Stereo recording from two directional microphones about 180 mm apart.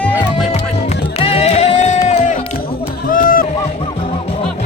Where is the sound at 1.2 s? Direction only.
35° left (ahead or behind).